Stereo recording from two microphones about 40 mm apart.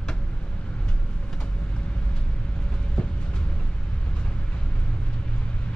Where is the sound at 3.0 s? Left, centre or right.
Centre.